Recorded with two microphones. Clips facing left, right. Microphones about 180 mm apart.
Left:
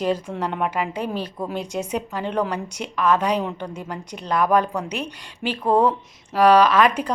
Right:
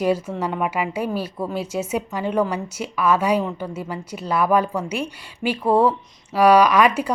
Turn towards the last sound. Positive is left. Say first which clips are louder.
# right 1 dB
turn(degrees=-10)  # may be behind; listen again after turning